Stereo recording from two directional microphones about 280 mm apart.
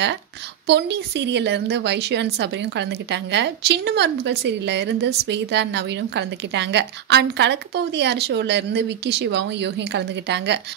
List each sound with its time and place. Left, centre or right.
0.7 s a woman's voice: right